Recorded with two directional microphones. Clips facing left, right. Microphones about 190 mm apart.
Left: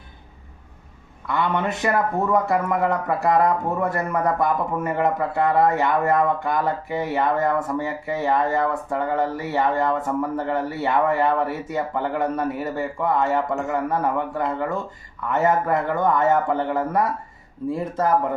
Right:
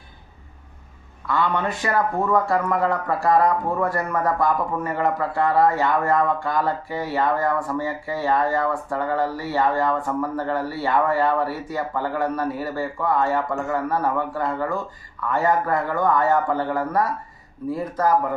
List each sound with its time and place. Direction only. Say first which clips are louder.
1.3 s speech: even; 20° left (ahead or behind)